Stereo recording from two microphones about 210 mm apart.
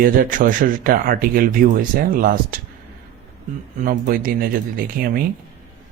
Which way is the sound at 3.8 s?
40° right (ahead or behind).